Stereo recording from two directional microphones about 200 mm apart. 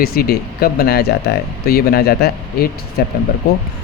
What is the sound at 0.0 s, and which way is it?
Speech, 50° left (ahead or behind).